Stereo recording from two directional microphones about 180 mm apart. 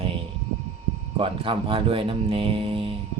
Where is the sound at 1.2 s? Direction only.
30° right (ahead or behind).